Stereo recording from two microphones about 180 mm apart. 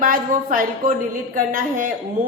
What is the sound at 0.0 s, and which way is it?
A woman's voice, 50° right (ahead or behind).